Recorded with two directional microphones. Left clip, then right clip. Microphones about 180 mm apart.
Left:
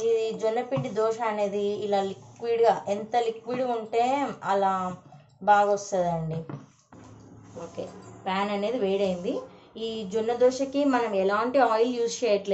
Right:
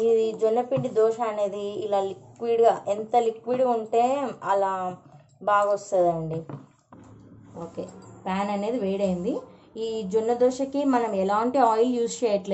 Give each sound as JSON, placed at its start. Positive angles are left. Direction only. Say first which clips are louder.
{"t": 0.1, "sound": "a woman's voice", "louder": "right 4 dB", "side_deg": -30}
{"t": 8.2, "sound": "a woman's voice", "louder": "even", "side_deg": -70}